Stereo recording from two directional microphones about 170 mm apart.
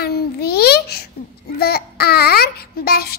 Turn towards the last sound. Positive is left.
turn(degrees=65)  # may be behind; listen again after turning